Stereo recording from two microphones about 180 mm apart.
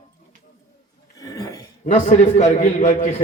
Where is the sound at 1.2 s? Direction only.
20° left (ahead or behind).